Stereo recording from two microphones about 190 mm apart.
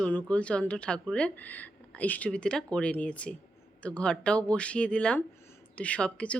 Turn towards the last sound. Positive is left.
turn(degrees=5)  # may be behind; listen again after turning